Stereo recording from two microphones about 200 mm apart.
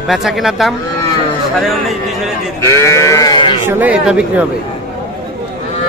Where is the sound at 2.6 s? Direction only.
15° left (ahead or behind).